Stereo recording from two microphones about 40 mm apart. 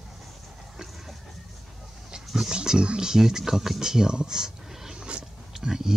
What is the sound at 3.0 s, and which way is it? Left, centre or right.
A child's voice, centre.